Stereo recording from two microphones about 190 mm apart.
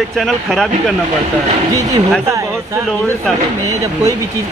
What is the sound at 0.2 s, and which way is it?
Speech, centre (ahead or behind).